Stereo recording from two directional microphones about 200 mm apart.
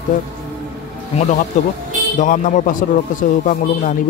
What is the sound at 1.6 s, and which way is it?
Speech, 35° left (ahead or behind).